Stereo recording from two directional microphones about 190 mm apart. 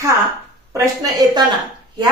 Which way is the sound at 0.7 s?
20° right (ahead or behind).